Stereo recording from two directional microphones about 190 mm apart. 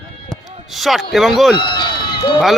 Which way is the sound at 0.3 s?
Centre (ahead or behind).